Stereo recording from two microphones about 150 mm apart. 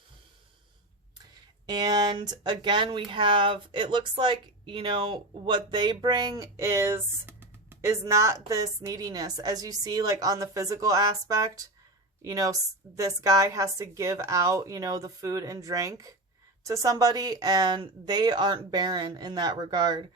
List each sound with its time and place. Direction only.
1.6 s a woman's voice: 25° right (ahead or behind)